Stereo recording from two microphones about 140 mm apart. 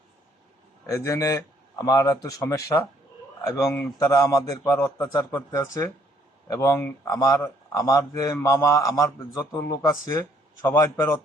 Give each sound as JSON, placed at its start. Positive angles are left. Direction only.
{"t": 0.9, "sound": "a man's voice", "side_deg": 20}
{"t": 3.9, "sound": "a man's voice", "side_deg": 25}